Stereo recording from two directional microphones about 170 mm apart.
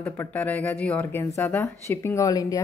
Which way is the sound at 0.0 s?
10° left (ahead or behind).